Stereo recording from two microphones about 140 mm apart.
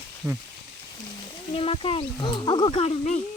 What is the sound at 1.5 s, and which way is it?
Speech, 40° left (ahead or behind).